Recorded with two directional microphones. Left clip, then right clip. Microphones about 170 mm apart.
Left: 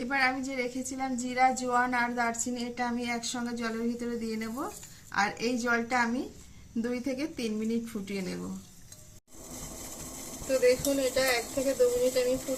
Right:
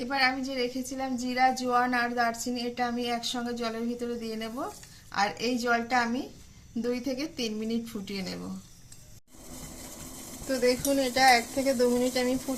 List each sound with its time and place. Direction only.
0.0 s a woman's voice: 35° right (ahead or behind)
10.6 s speech: 50° right (ahead or behind)